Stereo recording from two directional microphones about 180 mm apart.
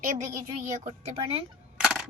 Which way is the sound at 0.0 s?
45° right (ahead or behind).